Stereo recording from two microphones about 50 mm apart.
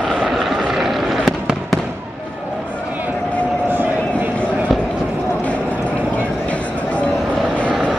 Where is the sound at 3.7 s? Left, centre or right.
Right.